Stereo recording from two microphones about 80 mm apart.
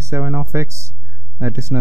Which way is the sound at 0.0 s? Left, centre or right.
Right.